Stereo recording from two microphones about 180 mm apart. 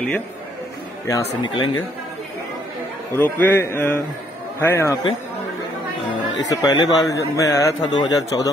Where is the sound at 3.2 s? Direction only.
10° left (ahead or behind).